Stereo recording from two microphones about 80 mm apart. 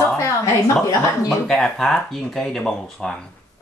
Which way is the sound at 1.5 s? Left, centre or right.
Centre.